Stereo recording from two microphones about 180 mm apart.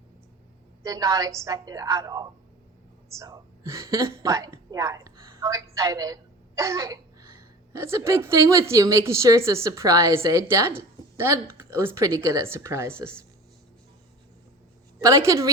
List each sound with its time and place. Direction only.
0.8 s a woman's voice: 20° right (ahead or behind)
14.9 s a woman's voice: 15° right (ahead or behind)